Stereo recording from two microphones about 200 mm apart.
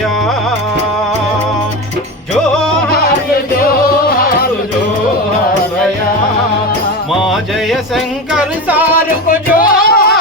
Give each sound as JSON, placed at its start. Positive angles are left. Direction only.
{"t": 2.5, "sound": "music", "side_deg": 5}
{"t": 7.1, "sound": "music", "side_deg": 0}
{"t": 9.6, "sound": "a sound", "side_deg": 45}